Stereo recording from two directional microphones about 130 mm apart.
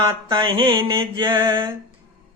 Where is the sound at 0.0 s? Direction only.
40° right (ahead or behind).